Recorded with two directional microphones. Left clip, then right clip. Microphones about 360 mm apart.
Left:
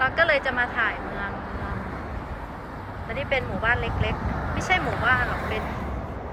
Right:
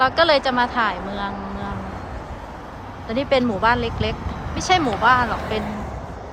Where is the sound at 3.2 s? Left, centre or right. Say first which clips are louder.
Right 7 dB; centre.